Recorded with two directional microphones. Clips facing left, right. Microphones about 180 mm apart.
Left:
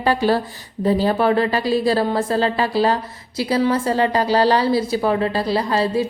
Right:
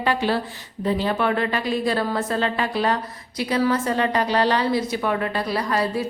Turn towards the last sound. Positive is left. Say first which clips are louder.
# left 4 dB
turn(degrees=30)  # may be behind; listen again after turning